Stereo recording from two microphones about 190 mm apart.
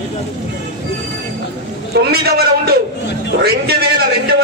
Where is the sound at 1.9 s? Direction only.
55° right (ahead or behind).